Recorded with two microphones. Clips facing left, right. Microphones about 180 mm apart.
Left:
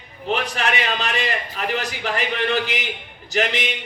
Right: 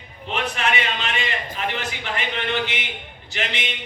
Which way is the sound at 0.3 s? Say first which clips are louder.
Left 2 dB; 40° left (ahead or behind).